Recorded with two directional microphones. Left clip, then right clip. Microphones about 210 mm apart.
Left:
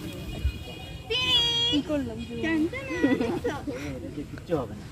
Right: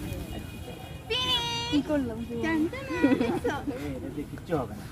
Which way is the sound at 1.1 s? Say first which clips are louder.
Left 3 dB; centre (ahead or behind).